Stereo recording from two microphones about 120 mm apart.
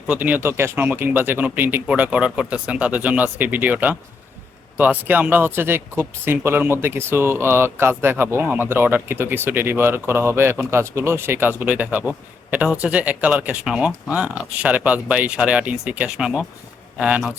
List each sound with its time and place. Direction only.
0.1 s speech: 15° right (ahead or behind)